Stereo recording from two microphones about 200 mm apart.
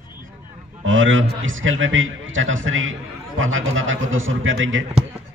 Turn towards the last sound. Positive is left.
turn(degrees=-75)  # may be behind; listen again after turning